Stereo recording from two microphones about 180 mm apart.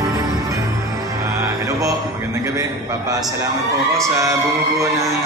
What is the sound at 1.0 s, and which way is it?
Music, 15° right (ahead or behind).